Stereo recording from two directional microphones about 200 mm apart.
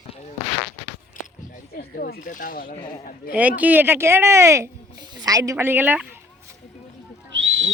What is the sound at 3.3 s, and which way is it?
Speech, 10° right (ahead or behind).